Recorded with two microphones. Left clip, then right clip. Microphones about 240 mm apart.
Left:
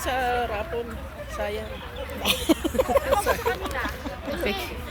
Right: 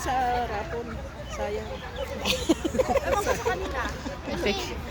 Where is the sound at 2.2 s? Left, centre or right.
Left.